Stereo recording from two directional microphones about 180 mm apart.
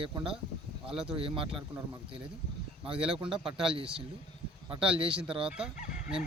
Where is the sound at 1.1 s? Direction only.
30° right (ahead or behind).